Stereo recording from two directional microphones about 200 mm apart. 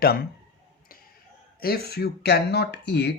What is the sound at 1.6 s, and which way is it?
Speech, 50° left (ahead or behind).